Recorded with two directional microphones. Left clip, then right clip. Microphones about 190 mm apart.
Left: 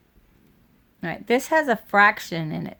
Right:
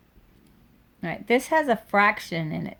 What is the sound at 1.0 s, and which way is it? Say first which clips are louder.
Speech: left 1 dB; 35° left (ahead or behind).